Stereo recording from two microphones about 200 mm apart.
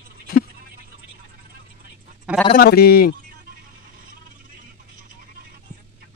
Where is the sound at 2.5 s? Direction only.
50° left (ahead or behind).